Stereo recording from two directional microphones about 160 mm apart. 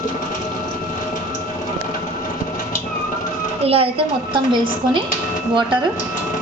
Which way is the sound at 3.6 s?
35° right (ahead or behind).